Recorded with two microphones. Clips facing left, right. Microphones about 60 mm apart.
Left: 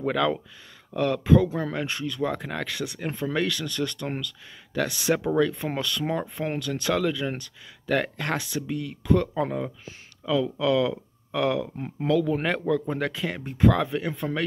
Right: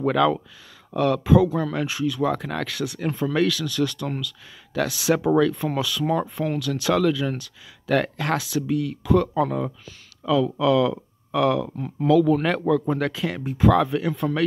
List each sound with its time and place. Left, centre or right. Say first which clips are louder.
0.0 s speech: right 5 dB; centre
6.4 s speech: right 4 dB; left
6.8 s speech: right 5 dB; centre
9.4 s speech: right 4 dB; centre
10.2 s speech: right 4 dB; centre
11.7 s speech: right 4 dB; left
12.1 s speech: right 5 dB; centre